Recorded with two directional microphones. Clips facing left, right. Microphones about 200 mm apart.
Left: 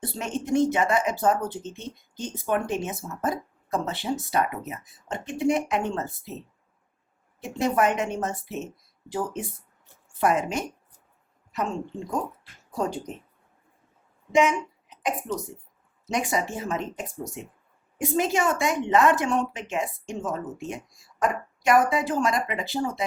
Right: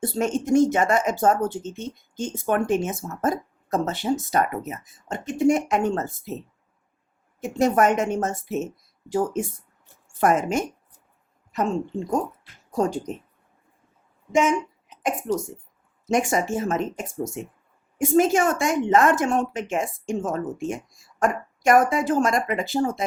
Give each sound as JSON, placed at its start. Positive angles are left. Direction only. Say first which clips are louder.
{"t": 0.0, "sound": "speech", "louder": "right 7 dB", "side_deg": -45}
{"t": 7.6, "sound": "speech", "louder": "right 4 dB", "side_deg": -45}
{"t": 12.7, "sound": "speech", "louder": "right 5 dB", "side_deg": -45}
{"t": 14.3, "sound": "a sound", "louder": "right 1 dB", "side_deg": -45}
{"t": 16.0, "sound": "speech", "louder": "right 5 dB", "side_deg": -50}